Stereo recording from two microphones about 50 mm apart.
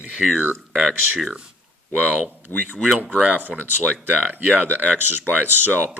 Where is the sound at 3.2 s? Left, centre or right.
Right.